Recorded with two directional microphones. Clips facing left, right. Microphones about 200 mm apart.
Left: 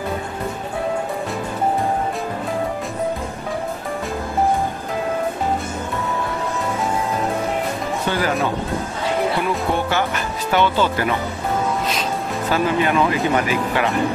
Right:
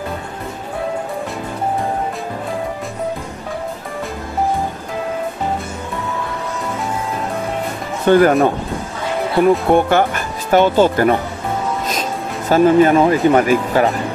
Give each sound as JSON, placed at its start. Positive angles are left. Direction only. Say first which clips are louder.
{"t": 8.1, "sound": "speech", "louder": "right 11 dB", "side_deg": -50}
{"t": 12.4, "sound": "speech", "louder": "right 9 dB", "side_deg": -45}